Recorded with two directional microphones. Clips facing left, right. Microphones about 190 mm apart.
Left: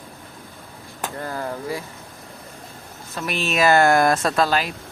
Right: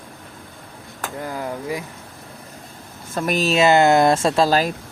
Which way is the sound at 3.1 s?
45° right (ahead or behind).